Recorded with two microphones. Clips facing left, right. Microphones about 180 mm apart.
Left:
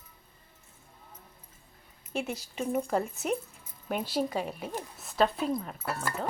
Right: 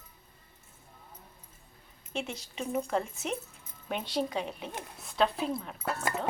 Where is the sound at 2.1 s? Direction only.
5° left (ahead or behind).